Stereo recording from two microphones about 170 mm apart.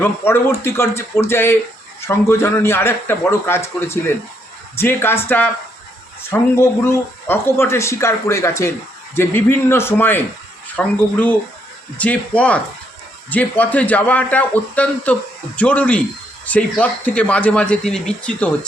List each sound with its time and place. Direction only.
0.0 s speech: 15° left (ahead or behind)